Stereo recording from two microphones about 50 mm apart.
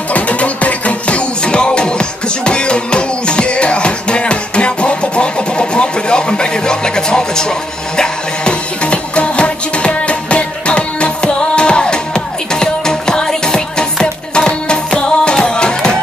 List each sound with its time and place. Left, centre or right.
0.1 s music: left